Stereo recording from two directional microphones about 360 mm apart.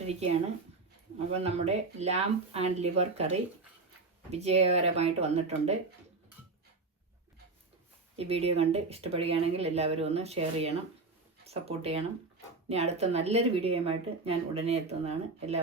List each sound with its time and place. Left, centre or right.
0.1 s speech: centre
8.1 s speech: centre